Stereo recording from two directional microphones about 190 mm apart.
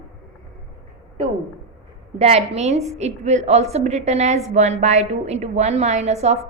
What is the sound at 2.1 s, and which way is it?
A woman's voice, 30° right (ahead or behind).